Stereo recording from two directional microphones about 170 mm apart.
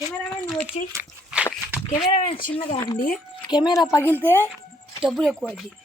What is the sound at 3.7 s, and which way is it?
Speech, 20° left (ahead or behind).